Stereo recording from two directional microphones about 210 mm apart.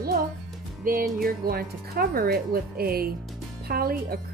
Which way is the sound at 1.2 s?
45° right (ahead or behind).